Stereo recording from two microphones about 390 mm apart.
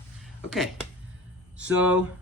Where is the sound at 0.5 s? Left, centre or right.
Centre.